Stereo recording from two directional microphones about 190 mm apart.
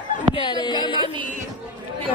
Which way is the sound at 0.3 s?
25° left (ahead or behind).